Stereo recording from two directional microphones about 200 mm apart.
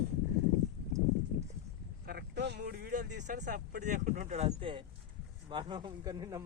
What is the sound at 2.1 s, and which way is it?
Speech, 55° right (ahead or behind).